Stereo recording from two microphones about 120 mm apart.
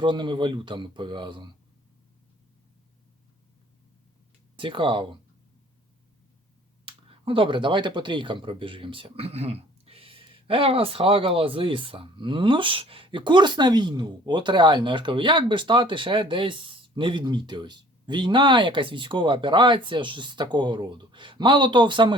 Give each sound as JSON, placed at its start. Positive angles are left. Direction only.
{"t": 0.0, "sound": "speech", "side_deg": -40}
{"t": 4.5, "sound": "speech", "side_deg": -45}
{"t": 6.8, "sound": "speech", "side_deg": -45}